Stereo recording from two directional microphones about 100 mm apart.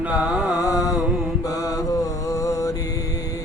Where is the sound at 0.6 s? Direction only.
35° left (ahead or behind).